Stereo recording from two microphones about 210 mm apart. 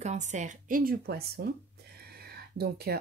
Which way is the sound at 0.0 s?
35° right (ahead or behind).